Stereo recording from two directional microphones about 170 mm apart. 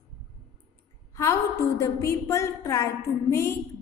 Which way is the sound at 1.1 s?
20° left (ahead or behind).